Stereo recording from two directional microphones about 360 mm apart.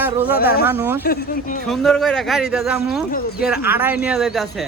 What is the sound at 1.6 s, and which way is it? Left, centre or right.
Speech, centre.